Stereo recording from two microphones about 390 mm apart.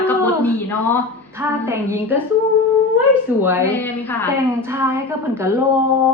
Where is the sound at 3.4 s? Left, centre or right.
Centre.